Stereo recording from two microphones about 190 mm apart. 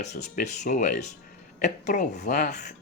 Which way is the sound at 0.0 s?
40° left (ahead or behind).